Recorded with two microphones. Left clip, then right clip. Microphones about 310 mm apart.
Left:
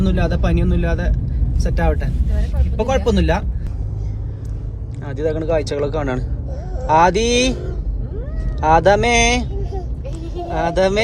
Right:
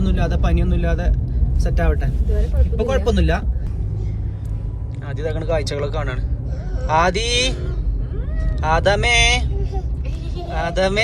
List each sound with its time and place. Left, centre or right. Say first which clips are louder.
0.0 s speech: left 3 dB; centre
5.0 s speech: left 4 dB; centre
8.6 s speech: left 4 dB; centre
10.5 s speech: left 3 dB; centre